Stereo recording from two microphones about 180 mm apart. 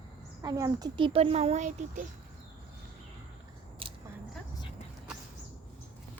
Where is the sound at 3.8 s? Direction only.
30° right (ahead or behind).